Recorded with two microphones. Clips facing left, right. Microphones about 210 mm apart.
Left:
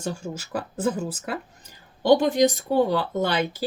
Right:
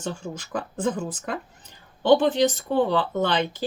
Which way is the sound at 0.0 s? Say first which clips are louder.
Left 1 dB; 10° left (ahead or behind).